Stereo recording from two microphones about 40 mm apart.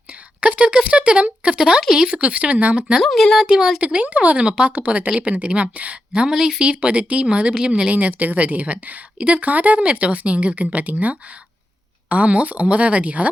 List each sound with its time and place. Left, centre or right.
0.4 s a sound: right
0.9 s speech: right
2.1 s speech: right
3.0 s speech: centre
3.4 s speech: right
3.8 s speech: right
4.4 s speech: right
7.9 s speech: right